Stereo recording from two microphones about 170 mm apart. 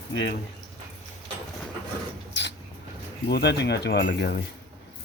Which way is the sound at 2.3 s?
90° left.